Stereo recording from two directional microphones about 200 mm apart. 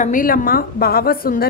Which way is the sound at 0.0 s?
40° left (ahead or behind).